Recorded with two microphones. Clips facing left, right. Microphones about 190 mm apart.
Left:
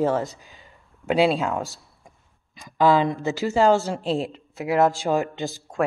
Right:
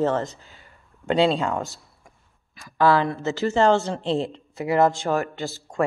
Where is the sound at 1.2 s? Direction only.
5° left (ahead or behind).